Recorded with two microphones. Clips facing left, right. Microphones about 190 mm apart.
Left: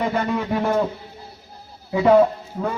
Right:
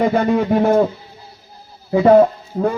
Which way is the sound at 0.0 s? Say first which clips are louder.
Right 7 dB; 45° right (ahead or behind).